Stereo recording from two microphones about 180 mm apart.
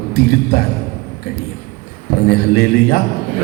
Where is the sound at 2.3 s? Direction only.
55° left (ahead or behind).